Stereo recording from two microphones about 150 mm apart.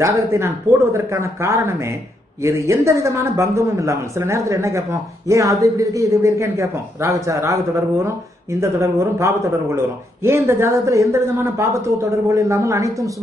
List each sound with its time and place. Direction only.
0.0 s a man's voice: 20° right (ahead or behind)